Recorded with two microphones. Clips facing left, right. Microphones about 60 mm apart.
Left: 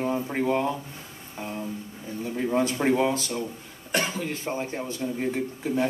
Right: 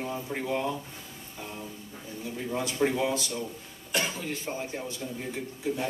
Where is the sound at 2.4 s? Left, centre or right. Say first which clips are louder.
Left 4 dB; left.